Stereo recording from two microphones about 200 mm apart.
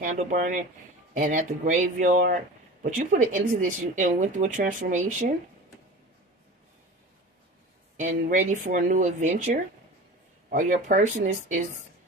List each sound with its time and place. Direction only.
0.0 s speech: 40° right (ahead or behind)
8.0 s speech: 40° right (ahead or behind)